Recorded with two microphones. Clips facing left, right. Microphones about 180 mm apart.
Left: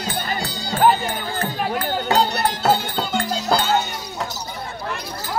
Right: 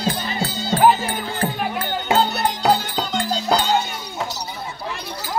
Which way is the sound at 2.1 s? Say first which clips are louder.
Right 1 dB; centre (ahead or behind).